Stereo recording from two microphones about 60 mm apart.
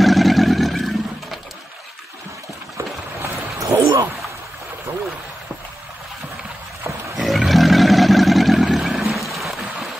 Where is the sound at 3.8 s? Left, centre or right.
Right.